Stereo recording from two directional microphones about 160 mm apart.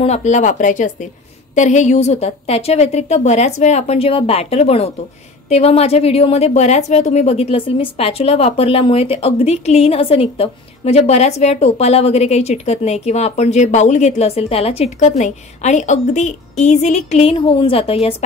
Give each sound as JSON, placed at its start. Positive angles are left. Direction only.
{"t": 0.0, "sound": "a woman's voice", "side_deg": 45}